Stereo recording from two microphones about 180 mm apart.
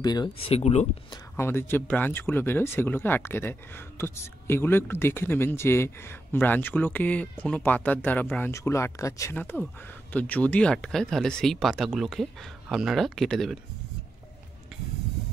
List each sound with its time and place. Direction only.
0.0 s speech: 25° left (ahead or behind)
1.3 s speech: 15° left (ahead or behind)